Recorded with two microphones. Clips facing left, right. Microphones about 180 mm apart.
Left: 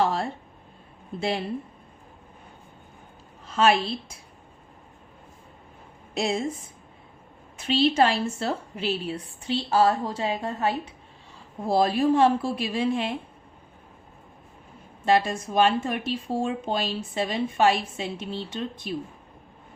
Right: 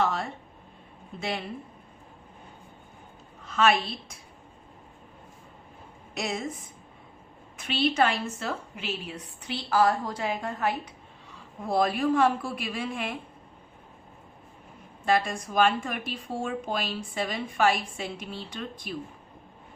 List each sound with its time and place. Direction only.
0.0 s a sound: 30° left (ahead or behind)
1.2 s speech: 30° left (ahead or behind)
3.4 s a woman's voice: 30° left (ahead or behind)
6.1 s a woman's voice: 30° left (ahead or behind)
7.6 s a woman's voice: 30° left (ahead or behind)
15.0 s a woman's voice: 25° left (ahead or behind)